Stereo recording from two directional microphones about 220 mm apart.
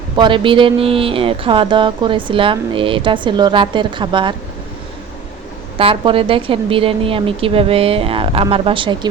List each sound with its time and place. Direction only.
0.2 s speech: 20° right (ahead or behind)
5.7 s speech: 25° right (ahead or behind)